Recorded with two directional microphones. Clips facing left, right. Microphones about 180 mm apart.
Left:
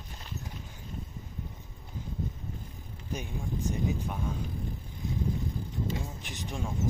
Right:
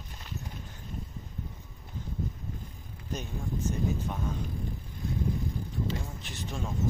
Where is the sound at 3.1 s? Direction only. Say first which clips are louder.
Even; 10° left (ahead or behind).